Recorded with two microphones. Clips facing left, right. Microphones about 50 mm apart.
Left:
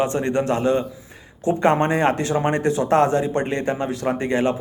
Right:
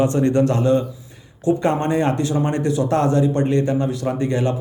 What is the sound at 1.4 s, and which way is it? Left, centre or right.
Speech, left.